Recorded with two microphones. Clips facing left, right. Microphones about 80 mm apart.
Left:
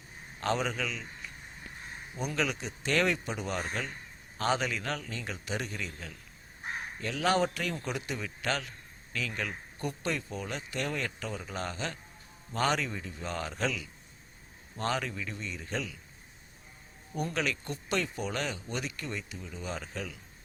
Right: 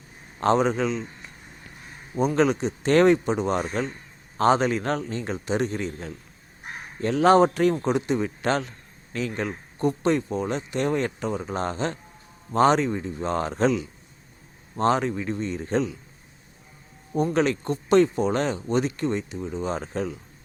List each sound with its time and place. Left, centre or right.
0.3 s a man's voice: right
17.1 s speech: right